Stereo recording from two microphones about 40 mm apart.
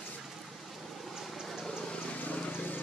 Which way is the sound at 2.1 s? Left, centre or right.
Left.